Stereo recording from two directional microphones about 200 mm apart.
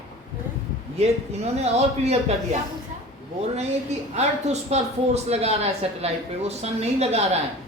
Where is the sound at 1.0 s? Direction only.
35° right (ahead or behind).